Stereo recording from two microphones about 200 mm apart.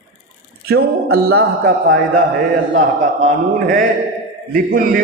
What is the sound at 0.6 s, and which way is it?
Speech, 50° right (ahead or behind).